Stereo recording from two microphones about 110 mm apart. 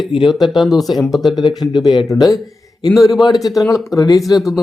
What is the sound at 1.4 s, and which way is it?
Speech, 45° left (ahead or behind).